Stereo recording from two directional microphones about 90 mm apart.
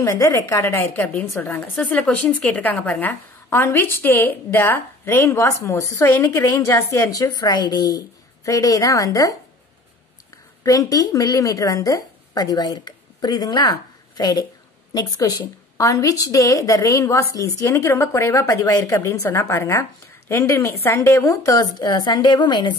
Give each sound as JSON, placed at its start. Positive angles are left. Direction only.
{"t": 0.0, "sound": "a woman's voice", "side_deg": 40}
{"t": 0.6, "sound": "a woman's voice", "side_deg": 25}
{"t": 8.5, "sound": "a woman's voice", "side_deg": 40}
{"t": 10.6, "sound": "a woman's voice", "side_deg": 40}
{"t": 21.7, "sound": "a woman's voice", "side_deg": 55}